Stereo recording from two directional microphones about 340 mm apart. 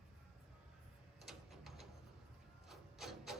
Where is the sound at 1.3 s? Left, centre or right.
Centre.